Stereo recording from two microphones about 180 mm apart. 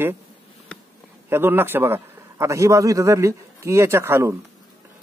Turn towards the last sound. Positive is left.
turn(degrees=-15)  # may be behind; listen again after turning